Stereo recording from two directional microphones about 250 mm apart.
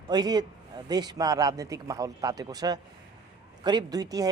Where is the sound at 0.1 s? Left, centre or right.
Centre.